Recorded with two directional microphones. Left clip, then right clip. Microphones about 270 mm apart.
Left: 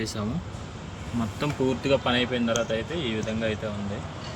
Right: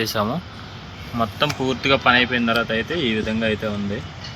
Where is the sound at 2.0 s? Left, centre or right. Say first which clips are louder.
Right 9 dB; right.